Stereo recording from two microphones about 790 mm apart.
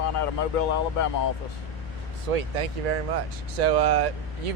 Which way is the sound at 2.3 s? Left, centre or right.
Right.